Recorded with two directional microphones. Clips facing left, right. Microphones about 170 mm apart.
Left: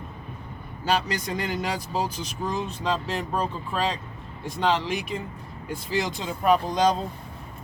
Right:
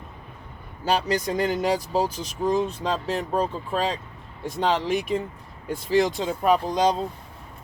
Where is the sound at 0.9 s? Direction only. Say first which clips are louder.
Right 3 dB; 40° right (ahead or behind).